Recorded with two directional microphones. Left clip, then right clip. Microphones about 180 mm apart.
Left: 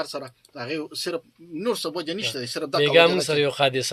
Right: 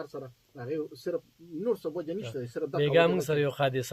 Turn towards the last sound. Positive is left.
turn(degrees=10)  # may be behind; listen again after turning